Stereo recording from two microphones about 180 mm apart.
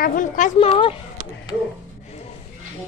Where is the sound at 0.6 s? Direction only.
30° left (ahead or behind).